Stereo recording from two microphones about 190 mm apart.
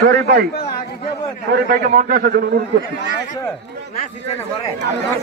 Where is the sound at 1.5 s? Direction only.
50° right (ahead or behind).